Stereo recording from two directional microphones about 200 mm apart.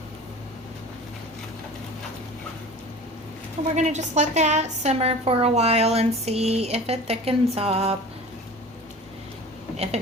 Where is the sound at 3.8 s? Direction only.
35° right (ahead or behind).